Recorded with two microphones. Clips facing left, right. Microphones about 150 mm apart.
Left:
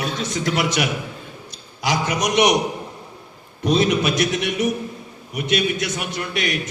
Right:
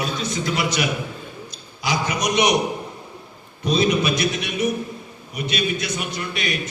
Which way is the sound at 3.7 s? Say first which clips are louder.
Left 1 dB; 70° left (ahead or behind).